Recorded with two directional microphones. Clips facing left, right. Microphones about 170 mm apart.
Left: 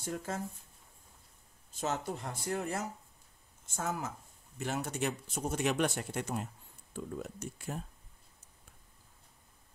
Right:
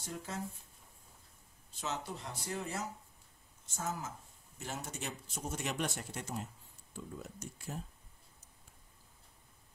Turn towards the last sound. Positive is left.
turn(degrees=60)  # may be behind; listen again after turning